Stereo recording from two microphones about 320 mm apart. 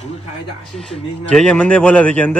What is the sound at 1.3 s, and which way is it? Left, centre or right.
A man's voice, centre.